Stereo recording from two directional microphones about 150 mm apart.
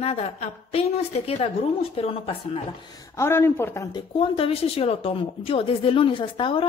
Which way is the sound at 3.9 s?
30° left (ahead or behind).